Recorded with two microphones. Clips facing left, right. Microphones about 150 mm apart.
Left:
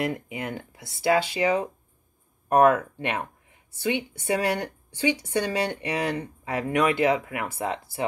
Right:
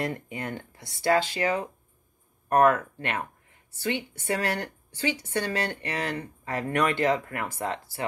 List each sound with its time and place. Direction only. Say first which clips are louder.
0.0 s speech: left 3 dB; 10° left (ahead or behind)